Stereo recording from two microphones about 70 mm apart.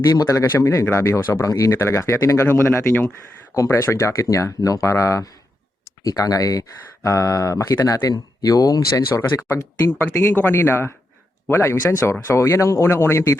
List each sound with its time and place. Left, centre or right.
0.3 s speech: left
1.7 s speech: left
7.9 s speech: left
10.3 s speech: left